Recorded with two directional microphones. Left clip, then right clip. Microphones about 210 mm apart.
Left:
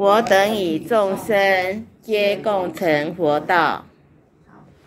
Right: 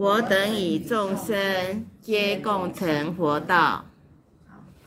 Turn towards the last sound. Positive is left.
turn(degrees=-15)  # may be behind; listen again after turning